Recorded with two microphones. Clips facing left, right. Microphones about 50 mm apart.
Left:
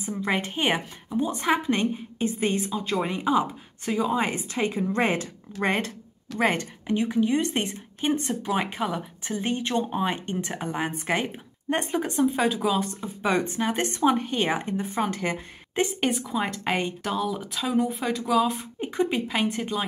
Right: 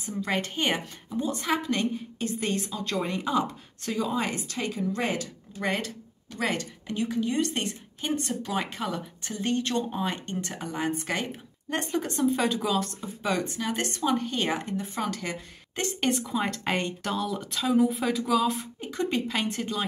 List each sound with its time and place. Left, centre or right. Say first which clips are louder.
0.0 s a woman's voice: left 2 dB; centre
13.3 s a woman's voice: left 4 dB; left
16.0 s speech: left 1 dB; centre